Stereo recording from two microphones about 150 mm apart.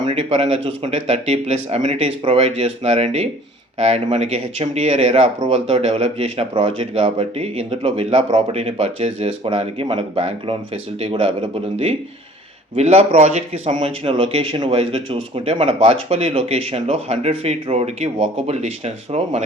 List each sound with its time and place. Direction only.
0.0 s speech: 45° right (ahead or behind)
12.7 s speech: 45° right (ahead or behind)
13.7 s speech: 40° right (ahead or behind)